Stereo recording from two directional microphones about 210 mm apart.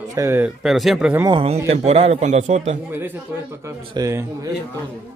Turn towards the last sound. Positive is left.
turn(degrees=-15)  # may be behind; listen again after turning